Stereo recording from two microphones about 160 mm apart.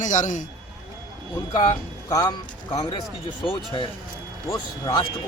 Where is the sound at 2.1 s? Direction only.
25° left (ahead or behind).